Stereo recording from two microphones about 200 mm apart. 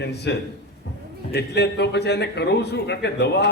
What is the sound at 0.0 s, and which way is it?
A man's voice, 55° left (ahead or behind).